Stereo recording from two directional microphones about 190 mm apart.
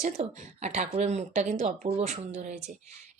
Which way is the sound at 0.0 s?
35° right (ahead or behind).